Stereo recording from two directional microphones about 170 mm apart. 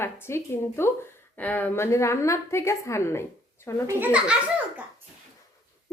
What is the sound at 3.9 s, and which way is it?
Speech, 10° right (ahead or behind).